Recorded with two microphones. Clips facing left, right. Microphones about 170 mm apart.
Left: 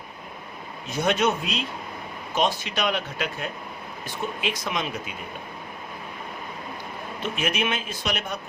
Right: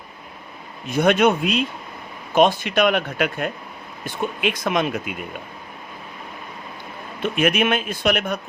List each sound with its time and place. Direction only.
0.9 s speech: 60° right (ahead or behind)
7.2 s speech: 55° right (ahead or behind)